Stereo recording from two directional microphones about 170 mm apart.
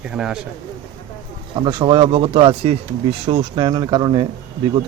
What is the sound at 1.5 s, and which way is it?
Speech, 30° right (ahead or behind).